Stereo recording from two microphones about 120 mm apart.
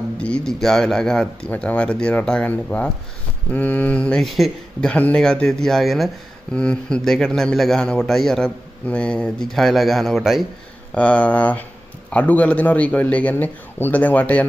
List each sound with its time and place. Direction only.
0.2 s a man's voice: 5° left (ahead or behind)
11.0 s speech: 10° left (ahead or behind)